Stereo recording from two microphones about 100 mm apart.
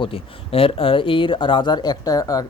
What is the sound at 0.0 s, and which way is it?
Speech, 65° left (ahead or behind).